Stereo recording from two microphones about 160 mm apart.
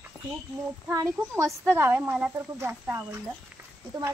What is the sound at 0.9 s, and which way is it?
Speech, 20° right (ahead or behind).